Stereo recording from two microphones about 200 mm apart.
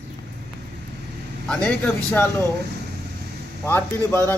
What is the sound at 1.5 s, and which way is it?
A man's voice, 5° left (ahead or behind).